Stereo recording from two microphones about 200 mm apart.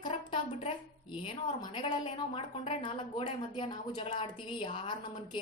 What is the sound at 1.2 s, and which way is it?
A woman's voice, 25° left (ahead or behind).